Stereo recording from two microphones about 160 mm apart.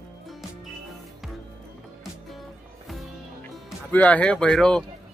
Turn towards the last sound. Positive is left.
turn(degrees=5)  # may be behind; listen again after turning